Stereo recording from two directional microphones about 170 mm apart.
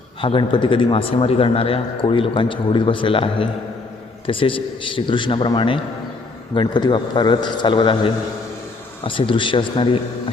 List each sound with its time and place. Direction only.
0.2 s a man's voice: 30° left (ahead or behind)